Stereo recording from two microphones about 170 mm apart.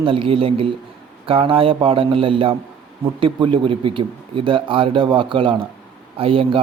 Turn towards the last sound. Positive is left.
turn(degrees=-30)  # may be behind; listen again after turning